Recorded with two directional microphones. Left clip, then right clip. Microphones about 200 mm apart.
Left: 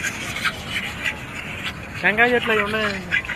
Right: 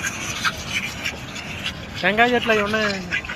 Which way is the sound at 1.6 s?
65° right (ahead or behind).